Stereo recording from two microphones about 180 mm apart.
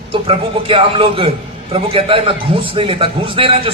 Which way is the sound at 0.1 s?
30° right (ahead or behind).